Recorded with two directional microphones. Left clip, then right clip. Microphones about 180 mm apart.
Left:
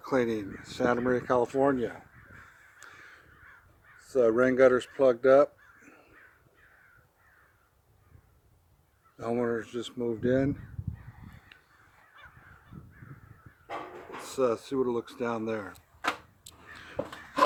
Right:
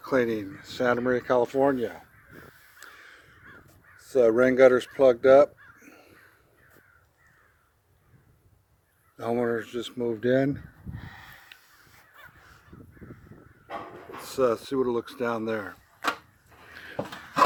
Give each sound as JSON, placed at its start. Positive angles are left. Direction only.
{"t": 0.0, "sound": "speech", "side_deg": -10}
{"t": 2.8, "sound": "crow", "side_deg": -15}
{"t": 3.9, "sound": "speech", "side_deg": -25}
{"t": 9.1, "sound": "speech", "side_deg": -20}
{"t": 11.5, "sound": "crow", "side_deg": -15}
{"t": 14.2, "sound": "speech", "side_deg": -20}
{"t": 16.6, "sound": "a sound", "side_deg": 15}